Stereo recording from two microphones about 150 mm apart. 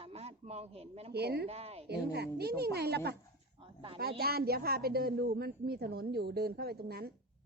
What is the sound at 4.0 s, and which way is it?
Speech, 90° right.